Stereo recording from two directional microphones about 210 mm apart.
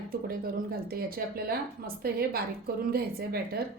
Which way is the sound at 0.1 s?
45° right (ahead or behind).